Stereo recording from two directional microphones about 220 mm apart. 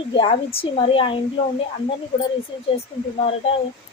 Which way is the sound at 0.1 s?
25° left (ahead or behind).